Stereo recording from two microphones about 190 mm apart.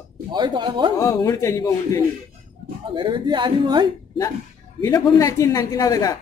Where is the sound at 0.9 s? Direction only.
20° left (ahead or behind).